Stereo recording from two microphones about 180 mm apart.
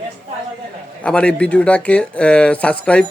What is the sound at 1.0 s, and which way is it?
Speech, 5° left (ahead or behind).